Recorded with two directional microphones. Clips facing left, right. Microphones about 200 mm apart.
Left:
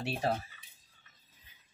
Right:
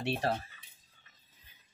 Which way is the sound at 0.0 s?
Centre (ahead or behind).